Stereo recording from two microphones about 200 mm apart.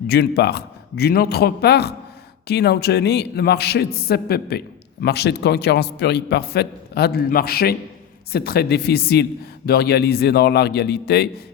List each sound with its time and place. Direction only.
0.1 s a man's voice: 55° left (ahead or behind)